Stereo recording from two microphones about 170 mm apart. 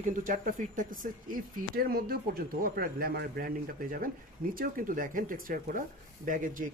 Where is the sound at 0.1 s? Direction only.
50° right (ahead or behind).